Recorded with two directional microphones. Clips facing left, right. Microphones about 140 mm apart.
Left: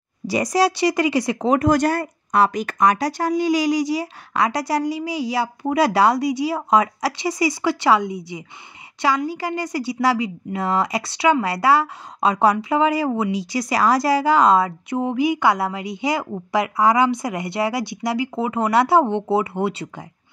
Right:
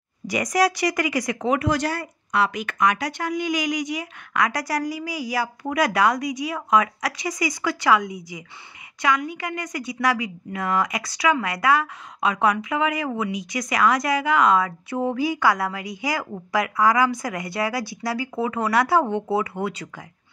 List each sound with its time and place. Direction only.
0.3 s a woman's voice: 30° left (ahead or behind)
14.9 s speech: 20° left (ahead or behind)